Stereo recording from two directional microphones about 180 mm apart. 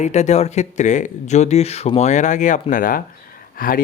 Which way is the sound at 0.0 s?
40° left (ahead or behind).